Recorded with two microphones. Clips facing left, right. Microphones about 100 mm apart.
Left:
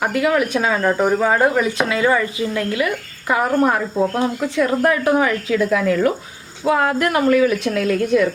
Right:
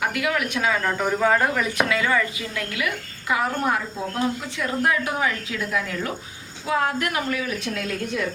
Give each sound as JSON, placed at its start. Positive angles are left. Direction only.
{"t": 0.0, "sound": "speech", "side_deg": 35}
{"t": 3.2, "sound": "a woman's voice", "side_deg": 45}
{"t": 6.7, "sound": "speech", "side_deg": 60}